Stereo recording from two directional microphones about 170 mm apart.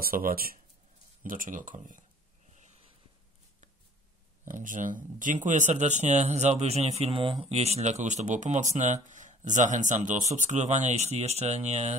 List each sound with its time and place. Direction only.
0.0 s speech: 60° right (ahead or behind)
4.5 s speech: 50° right (ahead or behind)